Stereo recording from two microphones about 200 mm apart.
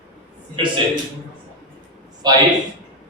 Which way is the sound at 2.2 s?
20° right (ahead or behind).